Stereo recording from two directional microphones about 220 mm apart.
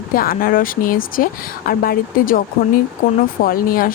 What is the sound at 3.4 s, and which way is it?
Speech, 40° left (ahead or behind).